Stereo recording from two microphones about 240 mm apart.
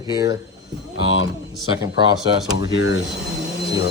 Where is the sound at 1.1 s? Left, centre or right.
Left.